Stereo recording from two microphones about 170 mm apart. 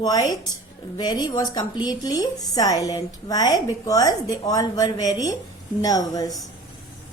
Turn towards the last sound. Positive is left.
turn(degrees=20)  # may be behind; listen again after turning